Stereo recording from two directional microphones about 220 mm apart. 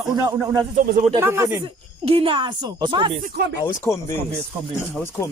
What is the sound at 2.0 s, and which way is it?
Speech, 25° right (ahead or behind).